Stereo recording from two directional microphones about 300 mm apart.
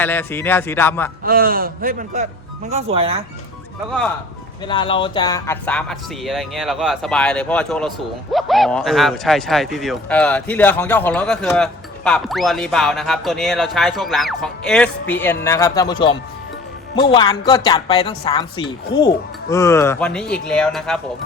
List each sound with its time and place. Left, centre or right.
0.0 s speech: centre
1.2 s a man's voice: right
4.6 s speech: centre